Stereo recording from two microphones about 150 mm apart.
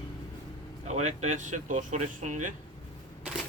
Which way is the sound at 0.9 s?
50° right (ahead or behind).